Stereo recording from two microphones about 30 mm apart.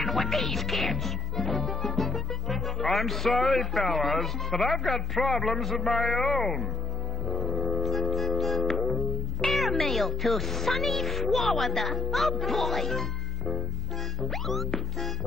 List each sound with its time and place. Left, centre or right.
0.0 s speech: centre
7.2 s music: centre
9.4 s speech: centre
14.3 s speech: centre